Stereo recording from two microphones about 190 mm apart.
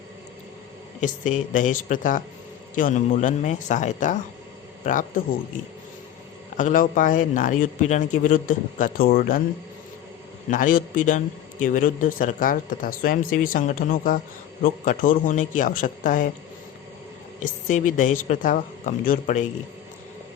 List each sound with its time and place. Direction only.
1.0 s a woman's voice: 40° left (ahead or behind)
6.6 s speech: 45° left (ahead or behind)
10.5 s speech: 45° left (ahead or behind)
17.4 s a woman's voice: 40° left (ahead or behind)